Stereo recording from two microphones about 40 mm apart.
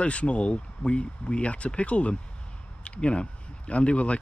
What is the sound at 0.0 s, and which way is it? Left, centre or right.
Speech, left.